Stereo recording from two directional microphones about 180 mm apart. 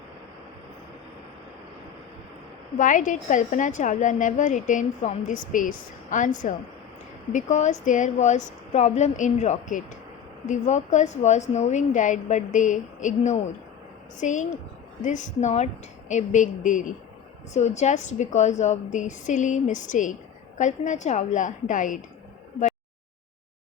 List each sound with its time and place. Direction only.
2.7 s a woman's voice: 45° left (ahead or behind)